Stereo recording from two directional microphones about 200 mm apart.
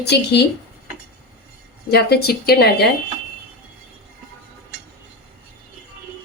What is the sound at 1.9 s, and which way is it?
Speech, 50° left (ahead or behind).